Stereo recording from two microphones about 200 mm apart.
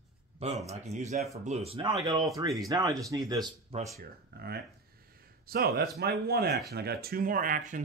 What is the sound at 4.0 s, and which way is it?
Speech, 50° right (ahead or behind).